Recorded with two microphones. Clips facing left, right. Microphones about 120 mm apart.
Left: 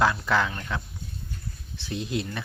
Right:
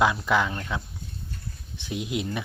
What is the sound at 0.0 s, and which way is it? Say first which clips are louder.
Speech: right 1 dB; 15° right (ahead or behind).